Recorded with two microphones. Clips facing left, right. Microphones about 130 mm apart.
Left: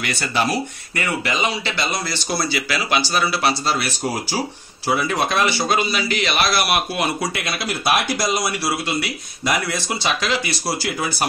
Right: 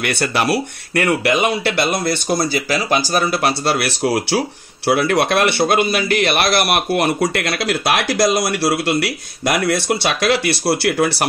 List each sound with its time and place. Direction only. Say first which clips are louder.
0.0 s a man's voice: right 3 dB; 65° right (ahead or behind)